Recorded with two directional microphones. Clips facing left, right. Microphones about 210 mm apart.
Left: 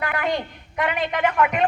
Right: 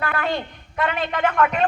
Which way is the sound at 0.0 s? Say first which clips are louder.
Even; 15° left (ahead or behind).